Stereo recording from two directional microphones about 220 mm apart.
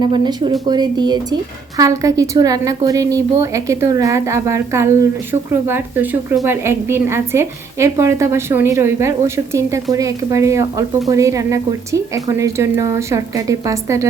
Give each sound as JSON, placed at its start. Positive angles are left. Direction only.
{"t": 0.0, "sound": "a woman's voice", "side_deg": -20}